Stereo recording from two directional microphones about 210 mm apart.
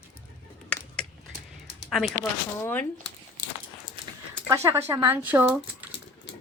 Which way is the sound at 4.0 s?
25° right (ahead or behind).